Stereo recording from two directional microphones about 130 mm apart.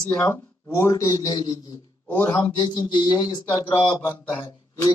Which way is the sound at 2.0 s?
15° left (ahead or behind).